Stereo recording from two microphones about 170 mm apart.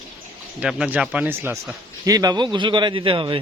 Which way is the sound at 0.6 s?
5° right (ahead or behind).